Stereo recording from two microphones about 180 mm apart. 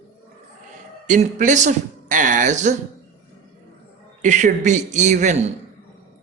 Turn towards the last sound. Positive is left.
turn(degrees=-40)  # may be behind; listen again after turning